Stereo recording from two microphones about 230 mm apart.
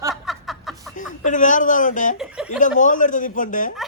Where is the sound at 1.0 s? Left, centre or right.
Left.